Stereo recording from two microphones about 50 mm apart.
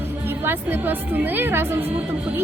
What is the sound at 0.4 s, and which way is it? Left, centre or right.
A woman's voice, right.